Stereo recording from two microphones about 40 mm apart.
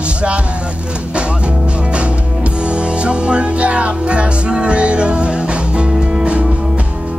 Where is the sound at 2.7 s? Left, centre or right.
Right.